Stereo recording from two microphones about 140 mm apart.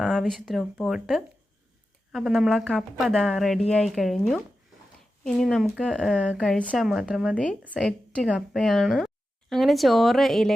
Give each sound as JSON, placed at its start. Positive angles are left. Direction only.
{"t": 0.0, "sound": "speech", "side_deg": 0}
{"t": 7.7, "sound": "a woman's voice", "side_deg": 5}